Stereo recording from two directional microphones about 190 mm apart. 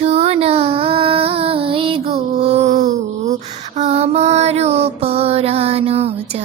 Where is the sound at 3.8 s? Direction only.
35° right (ahead or behind).